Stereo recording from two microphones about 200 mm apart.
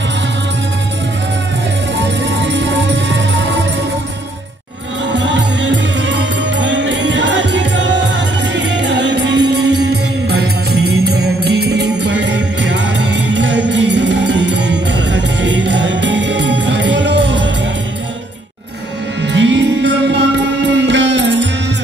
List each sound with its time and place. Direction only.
2.0 s music: 65° right (ahead or behind)
5.1 s music: 65° right (ahead or behind)
19.2 s music: 65° right (ahead or behind)